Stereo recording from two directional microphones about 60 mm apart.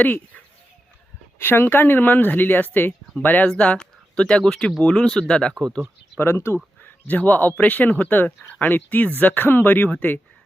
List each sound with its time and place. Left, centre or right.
1.4 s speech: left; by 5.6 s centre
6.1 s speech: left
6.8 s speech: left